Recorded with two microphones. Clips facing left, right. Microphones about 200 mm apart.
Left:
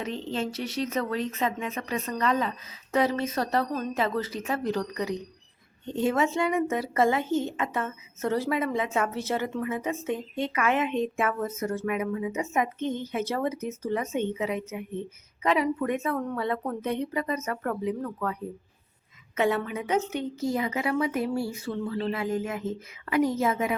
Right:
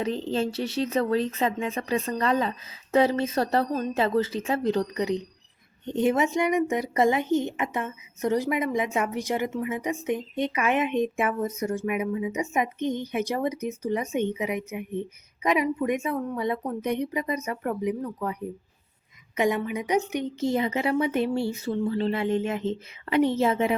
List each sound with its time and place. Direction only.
0.0 s a woman's voice: 35° right (ahead or behind); by 18.3 s 15° right (ahead or behind)
19.4 s a woman's voice: 15° right (ahead or behind)